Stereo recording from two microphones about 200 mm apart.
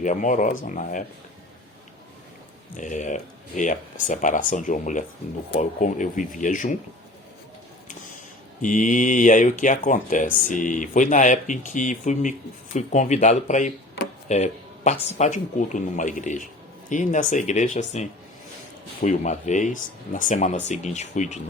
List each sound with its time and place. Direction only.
0.0 s speech: 40° left (ahead or behind)
2.7 s speech: 40° left (ahead or behind)
8.6 s speech: 40° left (ahead or behind)
14.3 s a sound: 35° left (ahead or behind)
15.0 s speech: 35° left (ahead or behind)